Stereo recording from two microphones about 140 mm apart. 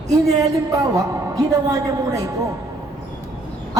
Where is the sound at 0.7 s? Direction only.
25° right (ahead or behind).